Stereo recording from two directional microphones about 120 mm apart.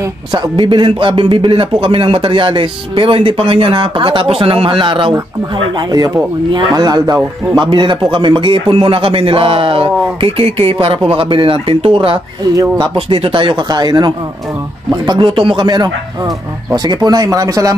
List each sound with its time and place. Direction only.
0.3 s a man's voice: 40° right (ahead or behind)
5.8 s a man's voice: 35° right (ahead or behind)